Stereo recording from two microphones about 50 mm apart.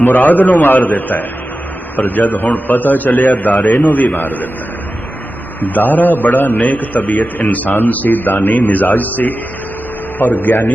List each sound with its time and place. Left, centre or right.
0.0 s a man's voice: left
5.5 s a man's voice: left